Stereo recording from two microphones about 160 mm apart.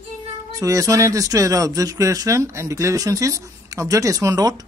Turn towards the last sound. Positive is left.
turn(degrees=-20)  # may be behind; listen again after turning